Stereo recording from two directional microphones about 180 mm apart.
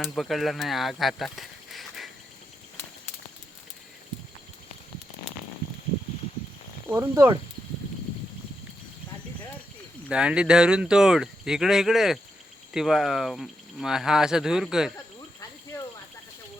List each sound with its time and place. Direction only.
0.2 s speech: centre (ahead or behind)
6.9 s speech: 15° right (ahead or behind)
10.1 s speech: 5° right (ahead or behind)